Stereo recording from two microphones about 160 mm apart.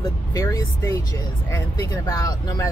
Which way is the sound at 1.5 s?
20° left (ahead or behind).